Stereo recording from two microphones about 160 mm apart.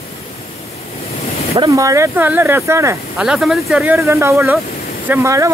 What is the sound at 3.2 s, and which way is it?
Speech, 5° right (ahead or behind).